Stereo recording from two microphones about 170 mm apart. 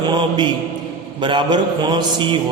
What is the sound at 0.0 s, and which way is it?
Mantra, 25° right (ahead or behind).